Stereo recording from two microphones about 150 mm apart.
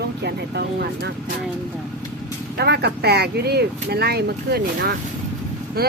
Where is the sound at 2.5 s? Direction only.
90° right.